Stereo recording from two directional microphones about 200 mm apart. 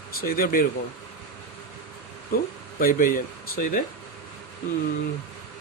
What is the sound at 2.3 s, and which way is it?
Speech, 50° left (ahead or behind).